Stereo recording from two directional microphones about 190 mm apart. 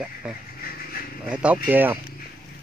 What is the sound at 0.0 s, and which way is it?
Speech, 5° right (ahead or behind).